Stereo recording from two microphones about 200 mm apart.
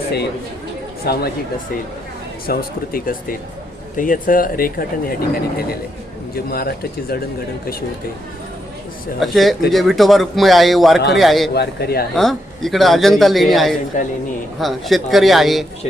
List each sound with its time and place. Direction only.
1.0 s speech: 50° left (ahead or behind)
2.5 s speech: 50° left (ahead or behind)
9.2 s a man's voice: centre (ahead or behind)
11.5 s speech: 55° left (ahead or behind)
12.1 s a man's voice: centre (ahead or behind)